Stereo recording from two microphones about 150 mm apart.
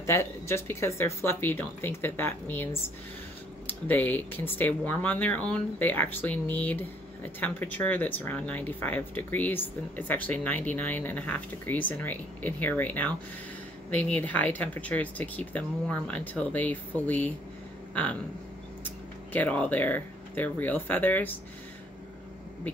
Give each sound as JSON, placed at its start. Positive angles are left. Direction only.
{"t": 0.0, "sound": "speech", "side_deg": 20}
{"t": 19.3, "sound": "speech", "side_deg": 10}